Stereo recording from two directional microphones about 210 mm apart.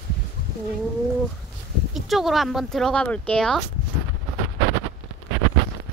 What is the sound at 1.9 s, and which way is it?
Speech, centre (ahead or behind).